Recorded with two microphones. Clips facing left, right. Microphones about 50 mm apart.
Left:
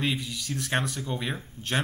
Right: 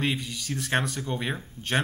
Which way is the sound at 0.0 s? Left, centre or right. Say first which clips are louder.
Right 1 dB; centre.